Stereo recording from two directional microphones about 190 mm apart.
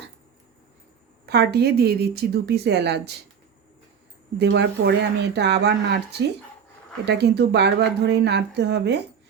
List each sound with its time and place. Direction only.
1.3 s speech: 60° right (ahead or behind)
4.4 s speech: 60° right (ahead or behind)